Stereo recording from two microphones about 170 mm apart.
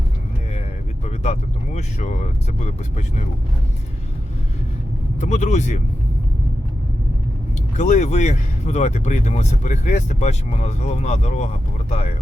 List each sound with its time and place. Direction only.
1.0 s speech: 40° left (ahead or behind)
5.2 s speech: 45° left (ahead or behind)
7.8 s speech: 45° left (ahead or behind)